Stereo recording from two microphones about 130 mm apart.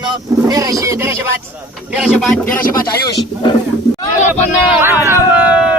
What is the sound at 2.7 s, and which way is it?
Speech, 30° left (ahead or behind).